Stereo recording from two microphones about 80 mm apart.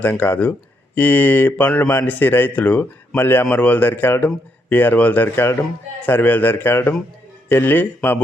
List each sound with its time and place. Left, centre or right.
0.0 s speech: left